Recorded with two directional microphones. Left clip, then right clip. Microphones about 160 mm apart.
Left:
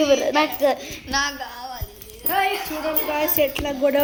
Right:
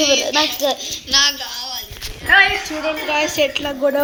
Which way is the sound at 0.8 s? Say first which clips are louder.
Right 7 dB; 55° left (ahead or behind).